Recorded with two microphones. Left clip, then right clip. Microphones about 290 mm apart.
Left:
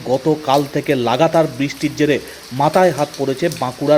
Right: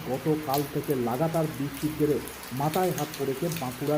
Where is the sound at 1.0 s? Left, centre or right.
Left.